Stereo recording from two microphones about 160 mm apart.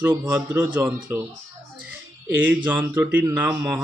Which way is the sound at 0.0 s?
10° right (ahead or behind).